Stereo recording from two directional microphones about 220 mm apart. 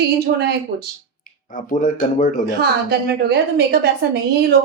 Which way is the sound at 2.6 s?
45° right (ahead or behind).